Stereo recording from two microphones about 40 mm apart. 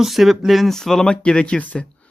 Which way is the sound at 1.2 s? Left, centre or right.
Left.